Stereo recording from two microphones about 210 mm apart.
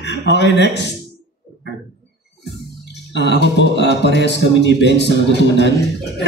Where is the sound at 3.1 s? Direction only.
55° left (ahead or behind).